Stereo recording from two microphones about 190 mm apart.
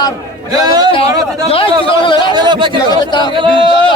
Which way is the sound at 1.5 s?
30° left (ahead or behind).